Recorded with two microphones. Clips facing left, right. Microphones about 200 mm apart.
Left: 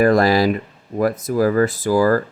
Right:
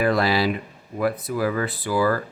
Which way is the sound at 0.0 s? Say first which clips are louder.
Left 6 dB; 45° left (ahead or behind).